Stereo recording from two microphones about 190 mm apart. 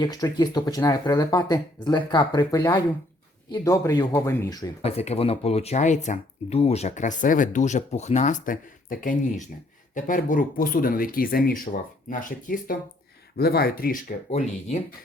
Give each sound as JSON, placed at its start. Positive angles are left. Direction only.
{"t": 0.0, "sound": "speech", "side_deg": 20}
{"t": 4.8, "sound": "speech", "side_deg": 30}